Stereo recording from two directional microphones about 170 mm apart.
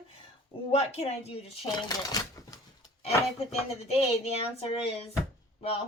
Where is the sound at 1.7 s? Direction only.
25° left (ahead or behind).